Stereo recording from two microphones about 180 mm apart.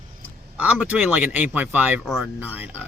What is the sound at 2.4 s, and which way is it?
Speech, 10° right (ahead or behind).